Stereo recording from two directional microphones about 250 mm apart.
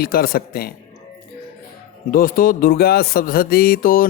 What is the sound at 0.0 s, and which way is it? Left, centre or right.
Music, left.